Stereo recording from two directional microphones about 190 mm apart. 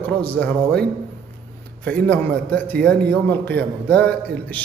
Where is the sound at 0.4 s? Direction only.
5° left (ahead or behind).